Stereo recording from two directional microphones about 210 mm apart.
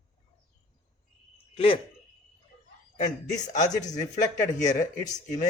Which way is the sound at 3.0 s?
35° left (ahead or behind).